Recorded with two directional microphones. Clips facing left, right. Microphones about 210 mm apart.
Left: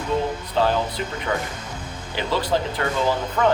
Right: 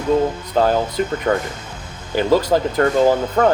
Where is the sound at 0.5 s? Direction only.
45° right (ahead or behind).